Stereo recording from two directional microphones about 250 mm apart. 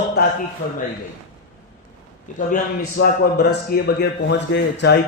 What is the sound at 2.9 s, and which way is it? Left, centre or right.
A man's voice, left.